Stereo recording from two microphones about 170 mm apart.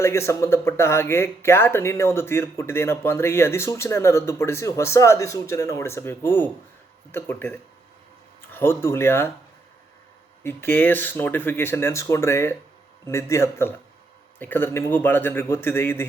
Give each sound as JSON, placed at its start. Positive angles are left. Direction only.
{"t": 0.0, "sound": "speech", "side_deg": 15}
{"t": 10.4, "sound": "speech", "side_deg": 15}